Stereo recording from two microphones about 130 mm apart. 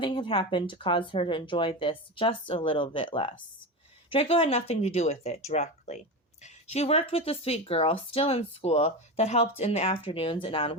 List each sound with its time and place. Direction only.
0.0 s speech: 40° left (ahead or behind)